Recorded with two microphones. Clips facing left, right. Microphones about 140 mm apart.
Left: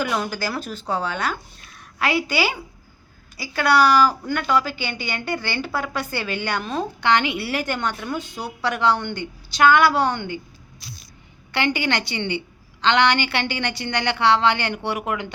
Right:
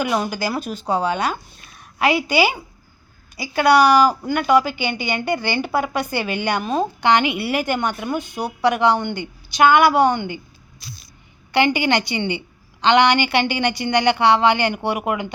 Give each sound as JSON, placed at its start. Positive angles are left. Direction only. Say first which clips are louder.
{"t": 0.0, "sound": "a woman's voice", "louder": "right 3 dB", "side_deg": -15}
{"t": 11.5, "sound": "a woman's voice", "louder": "right 5 dB", "side_deg": -15}